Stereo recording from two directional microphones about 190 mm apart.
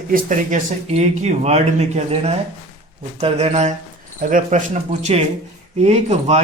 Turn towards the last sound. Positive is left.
turn(degrees=-35)  # may be behind; listen again after turning